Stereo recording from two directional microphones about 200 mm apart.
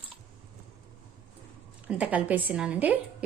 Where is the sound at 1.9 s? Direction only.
5° right (ahead or behind).